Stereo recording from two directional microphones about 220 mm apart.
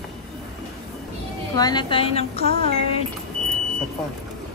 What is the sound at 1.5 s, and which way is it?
A woman's voice, 20° left (ahead or behind).